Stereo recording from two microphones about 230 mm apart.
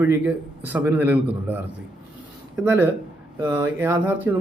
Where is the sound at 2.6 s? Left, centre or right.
Centre.